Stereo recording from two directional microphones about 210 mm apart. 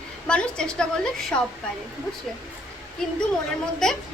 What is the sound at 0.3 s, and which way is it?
A woman's voice, 5° left (ahead or behind).